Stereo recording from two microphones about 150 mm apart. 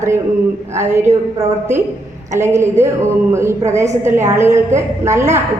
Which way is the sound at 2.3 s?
15° right (ahead or behind).